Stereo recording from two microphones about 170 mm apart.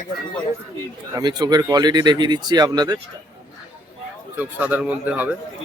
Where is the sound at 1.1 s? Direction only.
25° right (ahead or behind).